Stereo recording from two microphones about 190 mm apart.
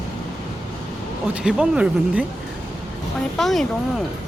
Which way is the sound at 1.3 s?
5° right (ahead or behind).